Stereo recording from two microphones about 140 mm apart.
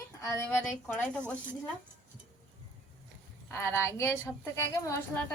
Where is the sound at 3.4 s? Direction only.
15° left (ahead or behind).